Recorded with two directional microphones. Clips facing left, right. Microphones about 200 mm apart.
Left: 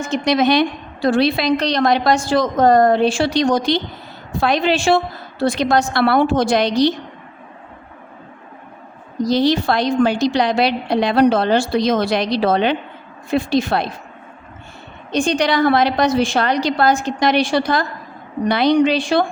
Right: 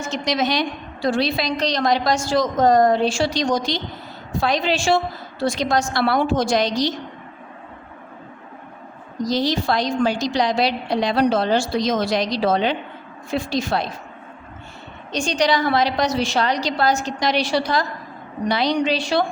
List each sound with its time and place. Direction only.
0.0 s a woman's voice: 55° left (ahead or behind)
9.2 s a woman's voice: 60° left (ahead or behind)
15.1 s a woman's voice: 55° left (ahead or behind)